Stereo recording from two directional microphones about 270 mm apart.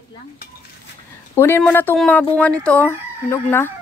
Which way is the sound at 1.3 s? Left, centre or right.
Centre.